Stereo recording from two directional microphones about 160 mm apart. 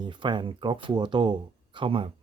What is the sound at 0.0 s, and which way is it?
Speech, 30° right (ahead or behind).